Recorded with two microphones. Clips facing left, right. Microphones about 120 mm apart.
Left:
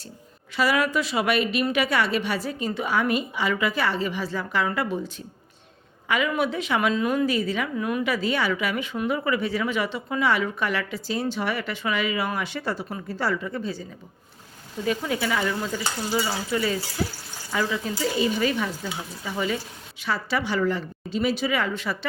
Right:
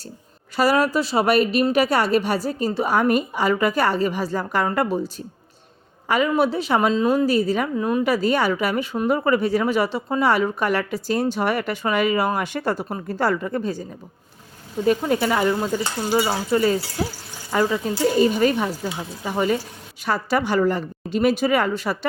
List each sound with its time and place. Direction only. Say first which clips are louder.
0.5 s a woman's voice: right 4 dB; 40° right (ahead or behind)
14.8 s a woman's voice: right 6 dB; 45° right (ahead or behind)